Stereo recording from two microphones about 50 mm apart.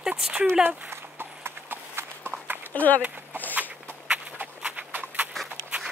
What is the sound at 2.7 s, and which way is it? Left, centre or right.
Speech, left.